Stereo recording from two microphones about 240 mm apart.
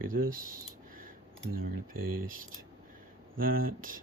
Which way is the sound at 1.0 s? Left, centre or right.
Right.